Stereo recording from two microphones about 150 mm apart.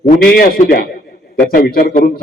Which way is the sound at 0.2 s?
80° left.